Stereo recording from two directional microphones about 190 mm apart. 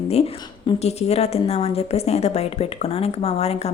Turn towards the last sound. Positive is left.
turn(degrees=35)  # may be behind; listen again after turning